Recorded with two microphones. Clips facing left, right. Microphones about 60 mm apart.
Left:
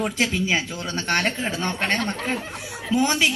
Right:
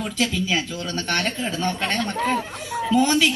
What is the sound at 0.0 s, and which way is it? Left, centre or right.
Speech, left.